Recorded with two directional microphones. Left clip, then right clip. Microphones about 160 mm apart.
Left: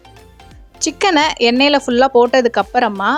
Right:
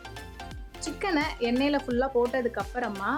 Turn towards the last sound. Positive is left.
turn(degrees=60)  # may be behind; listen again after turning